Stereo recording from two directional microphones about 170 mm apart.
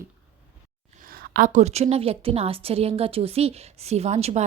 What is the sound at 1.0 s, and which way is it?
A woman's voice, 60° right (ahead or behind).